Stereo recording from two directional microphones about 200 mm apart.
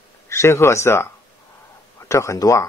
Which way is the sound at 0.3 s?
15° left (ahead or behind).